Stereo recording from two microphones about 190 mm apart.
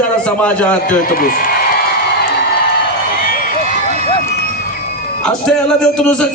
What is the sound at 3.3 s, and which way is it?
Run, 45° left (ahead or behind).